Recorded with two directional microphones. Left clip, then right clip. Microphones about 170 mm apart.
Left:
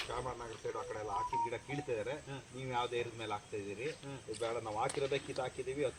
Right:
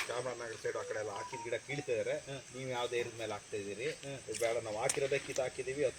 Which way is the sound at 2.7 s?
5° left (ahead or behind).